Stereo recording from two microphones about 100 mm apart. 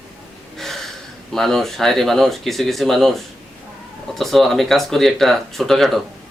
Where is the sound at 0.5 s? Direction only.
5° left (ahead or behind).